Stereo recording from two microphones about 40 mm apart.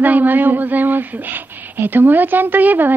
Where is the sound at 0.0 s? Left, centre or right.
Right.